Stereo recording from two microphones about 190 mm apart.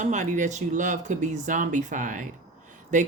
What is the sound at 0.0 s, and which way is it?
A woman's voice, 40° right (ahead or behind).